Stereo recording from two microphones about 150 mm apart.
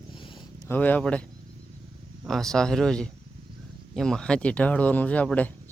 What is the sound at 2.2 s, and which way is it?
Speech, centre (ahead or behind).